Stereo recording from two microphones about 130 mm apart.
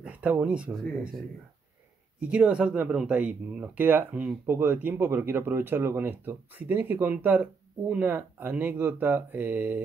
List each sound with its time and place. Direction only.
0.0 s speech: 10° right (ahead or behind)
2.1 s speech: 10° right (ahead or behind)